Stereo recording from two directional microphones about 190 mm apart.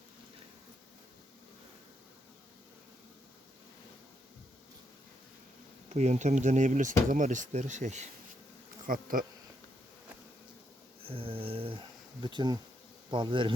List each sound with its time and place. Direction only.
5.9 s speech: 35° right (ahead or behind)
8.9 s bee: 45° right (ahead or behind)
11.0 s speech: 30° right (ahead or behind)